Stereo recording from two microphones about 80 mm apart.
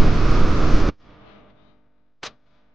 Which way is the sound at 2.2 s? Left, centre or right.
Centre.